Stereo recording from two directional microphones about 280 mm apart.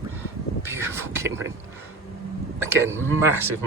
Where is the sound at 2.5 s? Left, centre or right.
Centre.